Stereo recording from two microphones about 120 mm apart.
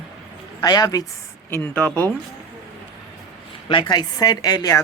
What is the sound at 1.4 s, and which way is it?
Speech, 20° left (ahead or behind).